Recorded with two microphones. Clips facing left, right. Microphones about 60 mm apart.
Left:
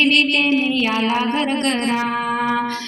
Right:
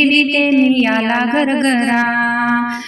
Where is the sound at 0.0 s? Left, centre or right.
Right.